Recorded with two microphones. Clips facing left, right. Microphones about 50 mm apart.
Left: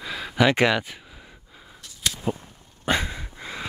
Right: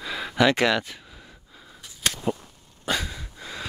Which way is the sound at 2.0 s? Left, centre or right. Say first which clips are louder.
Right 1 dB; right.